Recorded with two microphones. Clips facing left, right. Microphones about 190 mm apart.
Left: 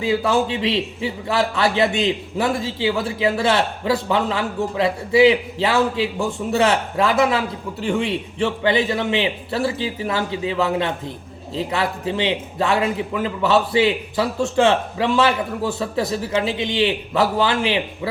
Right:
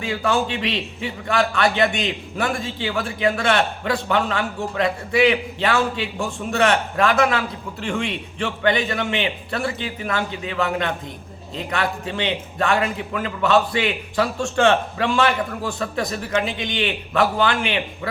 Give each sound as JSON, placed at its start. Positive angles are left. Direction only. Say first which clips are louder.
{"t": 0.5, "sound": "a man's voice", "louder": "left 4 dB", "side_deg": 25}